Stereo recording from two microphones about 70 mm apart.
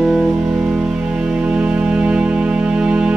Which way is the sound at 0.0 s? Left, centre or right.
Centre.